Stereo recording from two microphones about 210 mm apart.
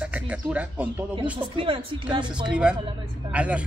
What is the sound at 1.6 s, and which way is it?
Speech, 25° right (ahead or behind).